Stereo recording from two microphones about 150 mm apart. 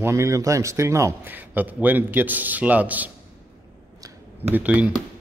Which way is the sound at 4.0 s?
15° right (ahead or behind).